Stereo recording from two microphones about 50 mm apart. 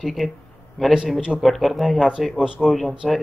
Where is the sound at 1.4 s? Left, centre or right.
Centre.